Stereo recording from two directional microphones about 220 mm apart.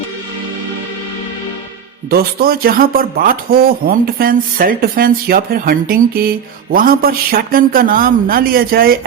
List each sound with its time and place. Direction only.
2.0 s speech: 45° right (ahead or behind)